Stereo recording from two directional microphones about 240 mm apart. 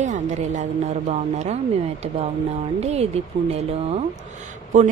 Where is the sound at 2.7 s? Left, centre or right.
Right.